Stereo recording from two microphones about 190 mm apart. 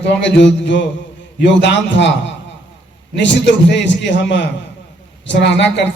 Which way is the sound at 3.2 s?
70° left (ahead or behind).